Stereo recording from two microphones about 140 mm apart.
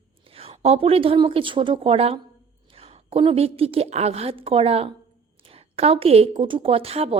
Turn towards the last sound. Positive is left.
turn(degrees=-45)  # may be behind; listen again after turning